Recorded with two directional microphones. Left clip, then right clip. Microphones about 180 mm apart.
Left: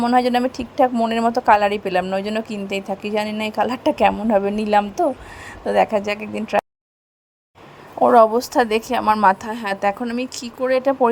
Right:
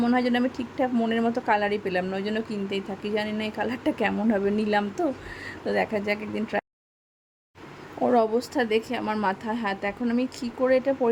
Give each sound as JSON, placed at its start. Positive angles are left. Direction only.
{"t": 0.0, "sound": "a woman's voice", "side_deg": 15}
{"t": 8.0, "sound": "a woman's voice", "side_deg": 20}